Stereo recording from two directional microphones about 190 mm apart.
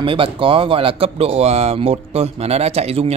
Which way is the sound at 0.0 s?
30° right (ahead or behind).